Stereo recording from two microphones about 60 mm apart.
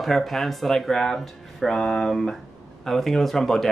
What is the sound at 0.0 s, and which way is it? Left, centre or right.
Speech, centre.